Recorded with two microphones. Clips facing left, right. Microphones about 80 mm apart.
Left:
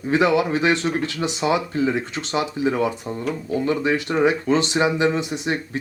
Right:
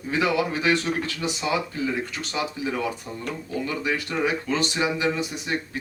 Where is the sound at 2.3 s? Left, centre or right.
Left.